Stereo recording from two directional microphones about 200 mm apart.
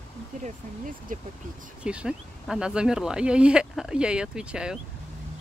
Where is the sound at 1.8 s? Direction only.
5° right (ahead or behind).